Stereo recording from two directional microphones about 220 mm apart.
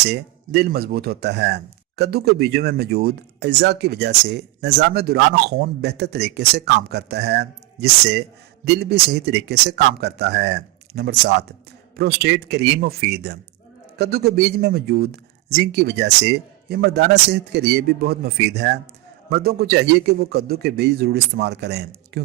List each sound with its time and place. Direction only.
0.0 s speech: 50° right (ahead or behind)